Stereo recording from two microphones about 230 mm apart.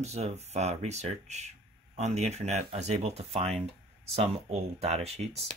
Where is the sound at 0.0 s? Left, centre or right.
Right.